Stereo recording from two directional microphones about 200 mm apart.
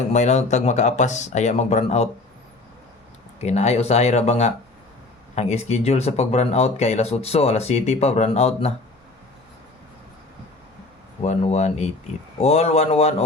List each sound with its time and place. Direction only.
0.1 s speech: 35° left (ahead or behind)
3.4 s speech: 35° left (ahead or behind)
11.2 s speech: 35° left (ahead or behind)